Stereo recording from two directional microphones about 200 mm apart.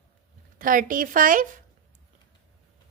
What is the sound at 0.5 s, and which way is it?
A woman's voice, 45° right (ahead or behind).